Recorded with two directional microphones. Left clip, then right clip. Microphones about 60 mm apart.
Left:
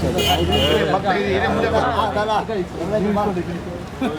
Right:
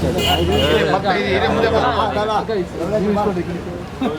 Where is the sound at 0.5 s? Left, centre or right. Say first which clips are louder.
Right 2 dB; right.